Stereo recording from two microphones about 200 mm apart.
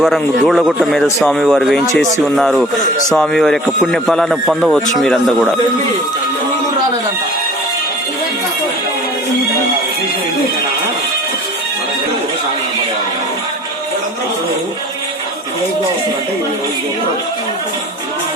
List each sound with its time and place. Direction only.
0.0 s a man's voice: centre (ahead or behind)